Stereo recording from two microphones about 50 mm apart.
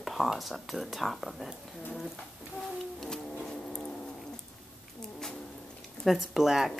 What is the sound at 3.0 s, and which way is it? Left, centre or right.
Music, centre.